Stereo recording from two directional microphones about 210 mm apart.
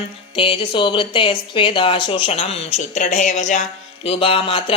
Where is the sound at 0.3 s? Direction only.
25° left (ahead or behind).